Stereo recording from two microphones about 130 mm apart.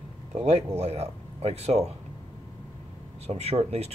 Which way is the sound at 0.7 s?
55° right (ahead or behind).